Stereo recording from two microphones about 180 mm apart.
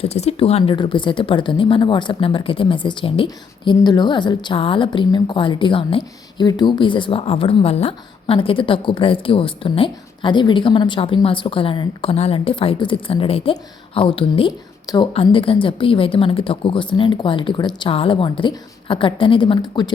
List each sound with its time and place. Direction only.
0.0 s speech: 35° left (ahead or behind)